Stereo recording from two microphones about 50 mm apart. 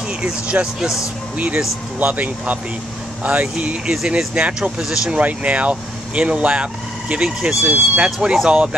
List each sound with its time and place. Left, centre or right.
0.2 s speech: right
5.1 s speech: right